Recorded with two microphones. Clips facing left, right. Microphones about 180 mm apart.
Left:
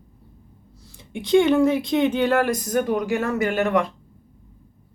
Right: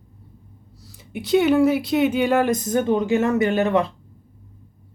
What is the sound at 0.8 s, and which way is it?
Speech, 5° right (ahead or behind).